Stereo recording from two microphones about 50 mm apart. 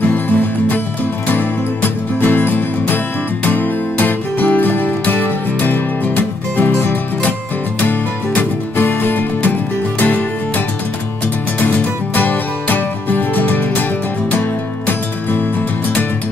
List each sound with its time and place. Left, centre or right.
0.0 s music: left
8.4 s music: left
12.2 s music: left